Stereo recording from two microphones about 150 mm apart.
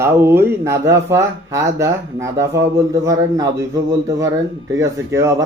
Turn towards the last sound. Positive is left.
turn(degrees=-20)  # may be behind; listen again after turning